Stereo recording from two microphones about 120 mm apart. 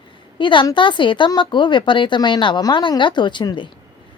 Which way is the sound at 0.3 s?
45° left (ahead or behind).